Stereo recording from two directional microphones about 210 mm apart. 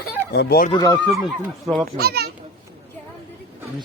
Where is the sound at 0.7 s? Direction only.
20° left (ahead or behind).